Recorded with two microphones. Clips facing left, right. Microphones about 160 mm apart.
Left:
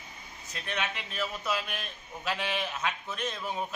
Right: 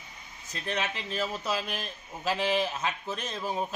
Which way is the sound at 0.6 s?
30° right (ahead or behind).